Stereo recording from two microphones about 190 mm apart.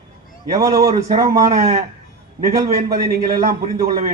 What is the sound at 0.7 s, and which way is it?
Speech, 50° right (ahead or behind).